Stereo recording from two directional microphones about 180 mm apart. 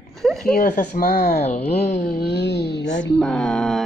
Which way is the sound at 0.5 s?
50° left (ahead or behind).